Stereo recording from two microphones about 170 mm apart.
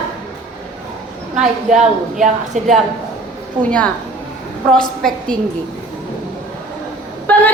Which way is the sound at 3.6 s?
5° left (ahead or behind).